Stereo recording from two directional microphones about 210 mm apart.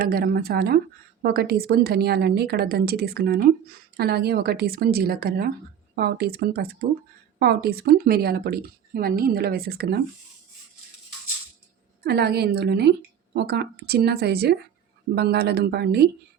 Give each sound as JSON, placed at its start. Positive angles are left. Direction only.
{"t": 0.0, "sound": "a woman's voice", "side_deg": -45}
{"t": 12.0, "sound": "a woman's voice", "side_deg": -50}